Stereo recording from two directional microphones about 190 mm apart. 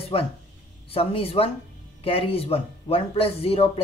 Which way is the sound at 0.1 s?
30° left (ahead or behind).